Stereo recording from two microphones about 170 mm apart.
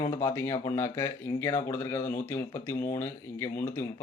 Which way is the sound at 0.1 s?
15° left (ahead or behind).